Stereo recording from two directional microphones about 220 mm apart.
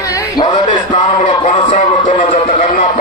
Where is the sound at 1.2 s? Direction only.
30° left (ahead or behind).